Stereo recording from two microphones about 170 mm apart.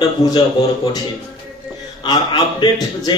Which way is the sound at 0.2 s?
20° left (ahead or behind).